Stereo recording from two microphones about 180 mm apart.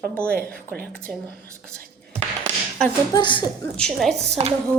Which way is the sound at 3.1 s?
25° left (ahead or behind).